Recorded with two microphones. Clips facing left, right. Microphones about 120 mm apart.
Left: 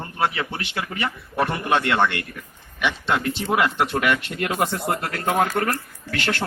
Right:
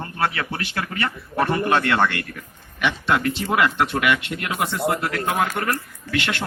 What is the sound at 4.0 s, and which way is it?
Speech, 35° left (ahead or behind).